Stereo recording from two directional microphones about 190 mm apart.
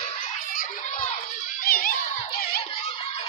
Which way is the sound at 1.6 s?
50° left (ahead or behind).